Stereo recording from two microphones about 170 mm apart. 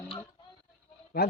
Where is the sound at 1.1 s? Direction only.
70° left (ahead or behind).